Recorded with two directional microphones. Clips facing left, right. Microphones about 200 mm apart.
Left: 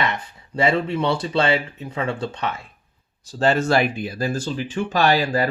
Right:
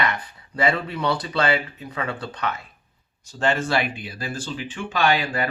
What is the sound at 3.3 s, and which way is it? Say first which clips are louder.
Speech: left 4 dB; 35° left (ahead or behind).